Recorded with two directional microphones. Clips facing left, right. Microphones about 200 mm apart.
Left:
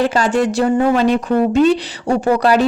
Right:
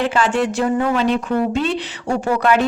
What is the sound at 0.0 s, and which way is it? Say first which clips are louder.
A woman's voice: left 3 dB; 40° left (ahead or behind).